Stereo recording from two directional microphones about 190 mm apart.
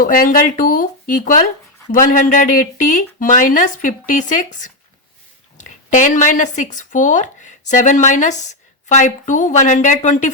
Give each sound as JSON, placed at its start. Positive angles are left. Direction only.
{"t": 0.0, "sound": "a woman's voice", "side_deg": 45}